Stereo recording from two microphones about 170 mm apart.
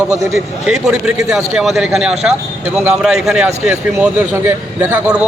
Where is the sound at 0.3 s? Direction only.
5° right (ahead or behind).